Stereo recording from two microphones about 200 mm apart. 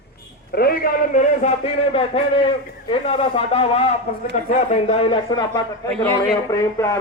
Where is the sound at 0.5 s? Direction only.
50° left (ahead or behind).